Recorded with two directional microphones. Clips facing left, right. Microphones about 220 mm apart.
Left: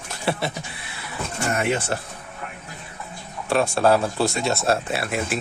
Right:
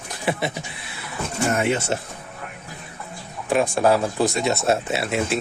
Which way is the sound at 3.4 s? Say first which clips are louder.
Even; 15° right (ahead or behind).